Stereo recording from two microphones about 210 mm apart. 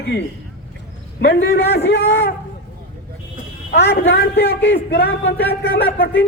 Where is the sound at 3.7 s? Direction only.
50° left (ahead or behind).